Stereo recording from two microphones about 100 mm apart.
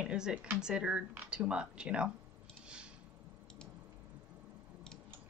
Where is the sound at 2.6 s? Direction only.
10° right (ahead or behind).